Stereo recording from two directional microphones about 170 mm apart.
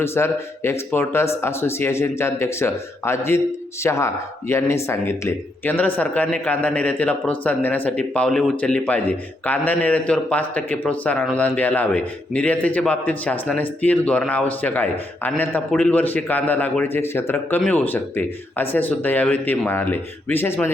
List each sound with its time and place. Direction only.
0.0 s speech: 15° left (ahead or behind)